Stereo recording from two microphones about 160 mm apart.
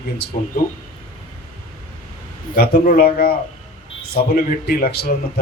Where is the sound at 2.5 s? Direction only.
65° left (ahead or behind).